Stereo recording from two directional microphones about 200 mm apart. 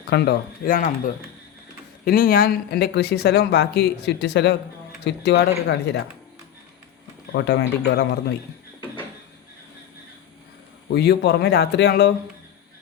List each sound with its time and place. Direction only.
0.1 s speech: 55° left (ahead or behind)
7.3 s speech: 55° left (ahead or behind)
10.9 s speech: 55° left (ahead or behind)